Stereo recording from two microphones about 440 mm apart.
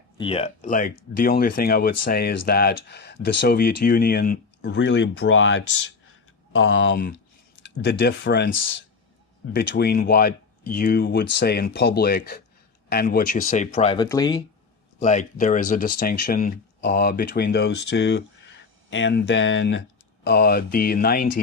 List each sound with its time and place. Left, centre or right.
0.2 s speech: centre